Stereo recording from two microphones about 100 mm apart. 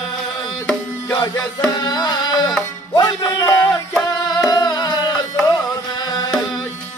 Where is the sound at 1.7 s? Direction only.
45° left (ahead or behind).